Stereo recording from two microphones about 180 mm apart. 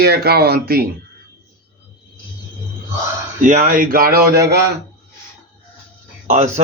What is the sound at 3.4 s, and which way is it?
Speech, 45° right (ahead or behind).